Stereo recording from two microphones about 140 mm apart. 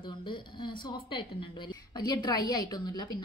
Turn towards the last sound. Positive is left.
turn(degrees=30)  # may be behind; listen again after turning